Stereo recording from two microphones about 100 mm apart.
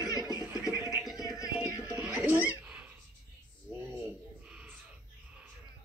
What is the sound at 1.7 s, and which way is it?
Music, 35° left (ahead or behind).